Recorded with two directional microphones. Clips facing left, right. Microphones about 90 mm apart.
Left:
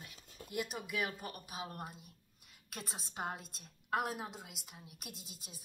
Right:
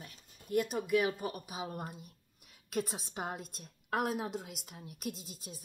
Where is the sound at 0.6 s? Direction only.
5° left (ahead or behind).